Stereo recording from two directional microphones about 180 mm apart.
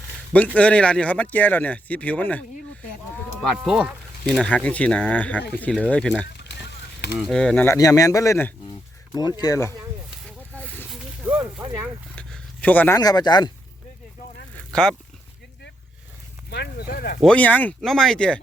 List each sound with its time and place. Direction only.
0.3 s speech: 10° left (ahead or behind)
3.6 s speech: centre (ahead or behind)
6.3 s vehicle: 70° left (ahead or behind)
7.2 s speech: 5° left (ahead or behind)
7.8 s speech: 20° left (ahead or behind)
11.2 s a sound: 10° right (ahead or behind)
12.1 s a sound: 5° left (ahead or behind)
13.0 s speech: 20° left (ahead or behind)
14.7 s speech: 5° left (ahead or behind)
16.5 s speech: 65° left (ahead or behind)
17.2 s speech: 5° left (ahead or behind)